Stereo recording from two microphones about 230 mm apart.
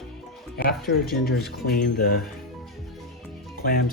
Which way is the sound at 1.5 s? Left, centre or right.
Left.